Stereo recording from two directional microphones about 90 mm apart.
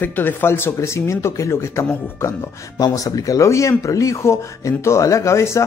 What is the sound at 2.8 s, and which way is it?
Speech, 45° left (ahead or behind).